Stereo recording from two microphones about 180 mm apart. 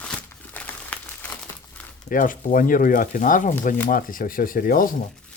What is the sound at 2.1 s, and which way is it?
Speech, 50° left (ahead or behind).